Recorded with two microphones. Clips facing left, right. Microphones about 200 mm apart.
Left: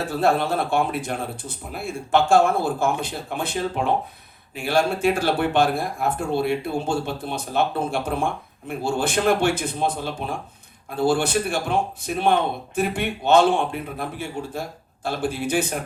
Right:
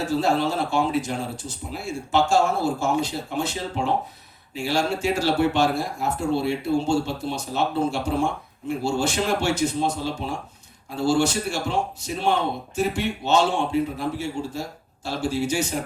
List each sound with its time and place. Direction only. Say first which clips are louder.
0.0 s speech: left 1 dB; 55° left (ahead or behind)